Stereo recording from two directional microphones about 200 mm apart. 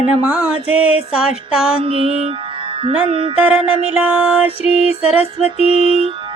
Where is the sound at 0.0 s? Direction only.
5° right (ahead or behind).